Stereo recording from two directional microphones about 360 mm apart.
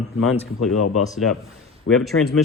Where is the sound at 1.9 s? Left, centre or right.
Left.